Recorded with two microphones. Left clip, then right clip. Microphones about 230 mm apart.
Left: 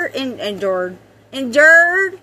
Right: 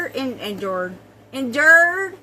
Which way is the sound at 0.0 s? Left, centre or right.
Left.